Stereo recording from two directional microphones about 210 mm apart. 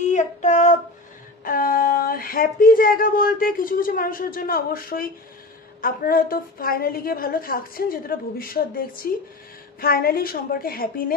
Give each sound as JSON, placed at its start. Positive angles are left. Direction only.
{"t": 0.0, "sound": "child singing", "side_deg": 35}
{"t": 1.4, "sound": "a woman's voice", "side_deg": 40}